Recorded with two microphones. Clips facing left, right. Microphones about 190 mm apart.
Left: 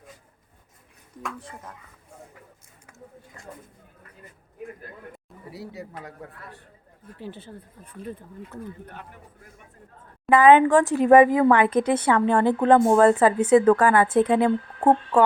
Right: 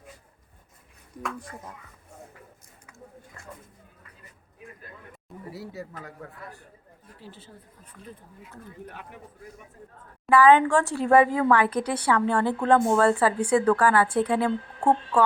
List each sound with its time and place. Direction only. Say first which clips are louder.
1.2 s speech: right 1 dB; 10° right (ahead or behind)
5.5 s speech: left 2 dB; 20° left (ahead or behind)
7.2 s speech: left 9 dB; 60° left (ahead or behind)
10.2 s speech: left 3 dB; 20° left (ahead or behind)